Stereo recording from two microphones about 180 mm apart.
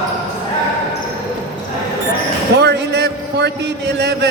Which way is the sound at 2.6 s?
70° right (ahead or behind).